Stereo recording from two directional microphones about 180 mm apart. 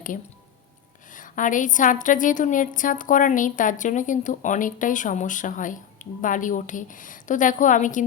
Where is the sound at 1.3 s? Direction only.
45° left (ahead or behind).